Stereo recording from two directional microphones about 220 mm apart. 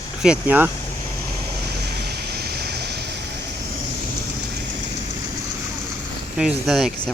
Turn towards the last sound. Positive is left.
turn(degrees=0)  # may be behind; listen again after turning